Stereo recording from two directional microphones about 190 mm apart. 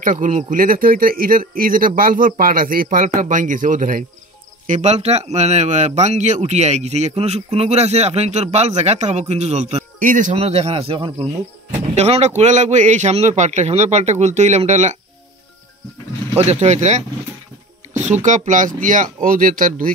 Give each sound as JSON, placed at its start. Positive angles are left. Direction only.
{"t": 0.0, "sound": "speech", "side_deg": -45}
{"t": 16.3, "sound": "speech", "side_deg": -35}